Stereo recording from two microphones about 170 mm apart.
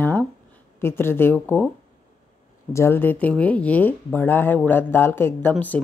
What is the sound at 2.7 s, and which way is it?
Speech, 15° left (ahead or behind).